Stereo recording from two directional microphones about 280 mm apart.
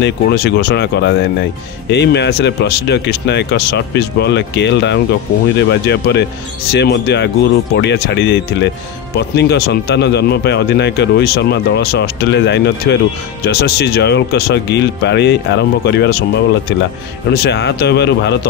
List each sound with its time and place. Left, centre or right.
0.0 s speech: left
17.3 s speech: left